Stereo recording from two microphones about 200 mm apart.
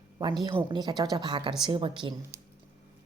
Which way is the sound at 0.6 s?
20° right (ahead or behind).